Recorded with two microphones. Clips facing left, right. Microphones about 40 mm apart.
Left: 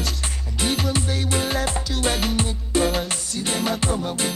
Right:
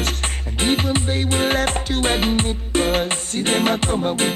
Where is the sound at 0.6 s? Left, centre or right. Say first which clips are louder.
Right 4 dB; right.